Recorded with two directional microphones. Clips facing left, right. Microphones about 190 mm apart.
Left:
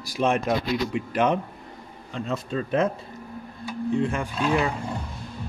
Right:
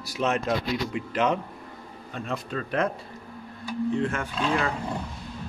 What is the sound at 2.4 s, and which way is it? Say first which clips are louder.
Speech: left 4 dB; 25° left (ahead or behind).